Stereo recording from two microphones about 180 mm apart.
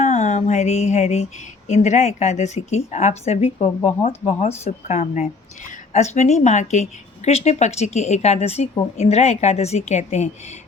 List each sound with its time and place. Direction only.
0.0 s speech: 40° left (ahead or behind)